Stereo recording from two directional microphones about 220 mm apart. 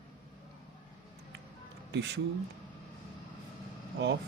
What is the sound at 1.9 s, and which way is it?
Speech, 50° right (ahead or behind).